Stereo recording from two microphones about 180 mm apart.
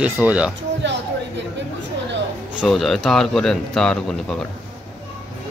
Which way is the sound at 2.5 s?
Centre (ahead or behind).